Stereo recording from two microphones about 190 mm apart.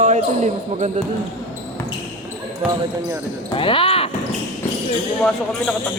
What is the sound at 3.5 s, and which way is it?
Speech, 25° left (ahead or behind).